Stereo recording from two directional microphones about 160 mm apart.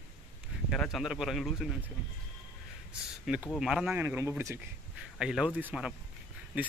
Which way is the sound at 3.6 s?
Centre (ahead or behind).